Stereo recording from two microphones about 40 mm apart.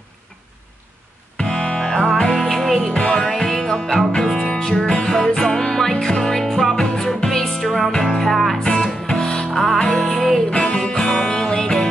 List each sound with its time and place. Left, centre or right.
1.3 s music: left
2.4 s music: centre
2.9 s music: left; by 8.5 s centre
9.1 s music: centre